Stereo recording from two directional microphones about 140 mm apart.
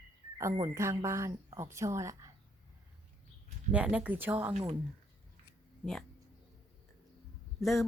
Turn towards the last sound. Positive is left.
turn(degrees=0)  # may be behind; listen again after turning